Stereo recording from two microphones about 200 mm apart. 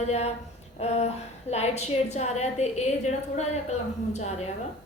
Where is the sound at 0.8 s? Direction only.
30° left (ahead or behind).